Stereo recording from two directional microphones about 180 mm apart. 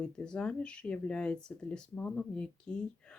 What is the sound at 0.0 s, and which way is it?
Speech, 5° left (ahead or behind).